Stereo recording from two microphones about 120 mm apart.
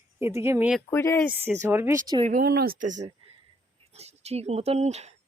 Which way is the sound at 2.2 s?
90° right.